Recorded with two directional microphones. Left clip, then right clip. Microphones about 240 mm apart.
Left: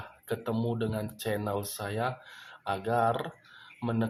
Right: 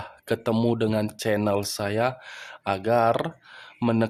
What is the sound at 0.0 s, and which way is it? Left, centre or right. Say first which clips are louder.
Speech: right 8 dB; right.